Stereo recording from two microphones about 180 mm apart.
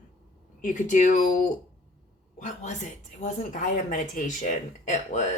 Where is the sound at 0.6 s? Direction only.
45° left (ahead or behind).